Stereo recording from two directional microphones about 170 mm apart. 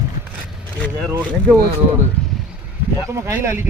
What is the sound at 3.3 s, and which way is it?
Speech, 15° right (ahead or behind).